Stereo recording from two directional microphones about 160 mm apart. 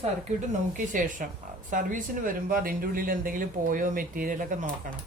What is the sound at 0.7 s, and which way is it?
Speech, 55° right (ahead or behind).